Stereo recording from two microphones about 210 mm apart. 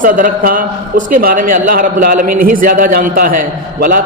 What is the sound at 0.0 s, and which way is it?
A man's voice, 40° right (ahead or behind).